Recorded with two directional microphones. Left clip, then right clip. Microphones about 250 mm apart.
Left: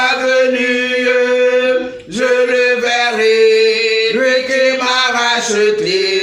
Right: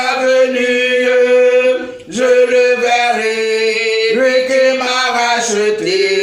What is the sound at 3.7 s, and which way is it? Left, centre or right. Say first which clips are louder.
Music: left 1 dB; right.